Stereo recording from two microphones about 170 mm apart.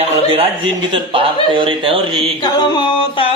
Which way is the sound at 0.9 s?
30° right (ahead or behind).